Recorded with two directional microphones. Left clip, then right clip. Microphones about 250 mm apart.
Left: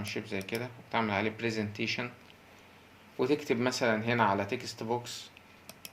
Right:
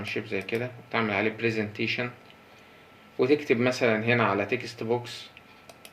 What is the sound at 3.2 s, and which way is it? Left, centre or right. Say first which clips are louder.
Speech: right 6 dB; left.